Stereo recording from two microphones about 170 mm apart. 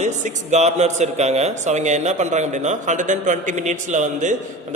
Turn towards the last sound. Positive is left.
turn(degrees=-45)  # may be behind; listen again after turning